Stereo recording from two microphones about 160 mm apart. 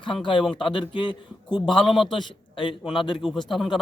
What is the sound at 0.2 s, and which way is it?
A man's voice, 30° left (ahead or behind).